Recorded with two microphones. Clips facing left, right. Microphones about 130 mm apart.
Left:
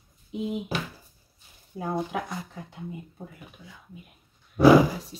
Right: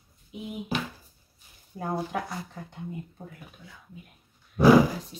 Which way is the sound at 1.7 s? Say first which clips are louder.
Left 1 dB; 5° left (ahead or behind).